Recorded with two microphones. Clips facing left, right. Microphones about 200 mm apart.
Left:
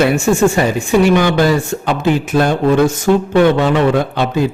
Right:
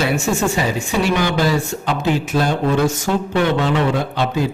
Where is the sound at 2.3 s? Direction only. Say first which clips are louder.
Left 6 dB; 50° left (ahead or behind).